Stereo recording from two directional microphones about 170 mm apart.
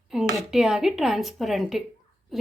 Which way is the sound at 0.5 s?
5° right (ahead or behind).